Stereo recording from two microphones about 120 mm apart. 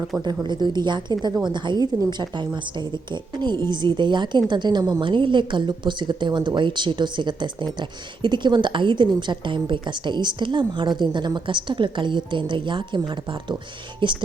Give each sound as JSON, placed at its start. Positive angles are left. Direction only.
{"t": 0.4, "sound": "a woman's voice", "side_deg": -40}
{"t": 14.0, "sound": "a woman's voice", "side_deg": -40}